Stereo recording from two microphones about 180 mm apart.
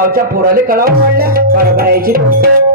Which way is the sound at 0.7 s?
55° right (ahead or behind).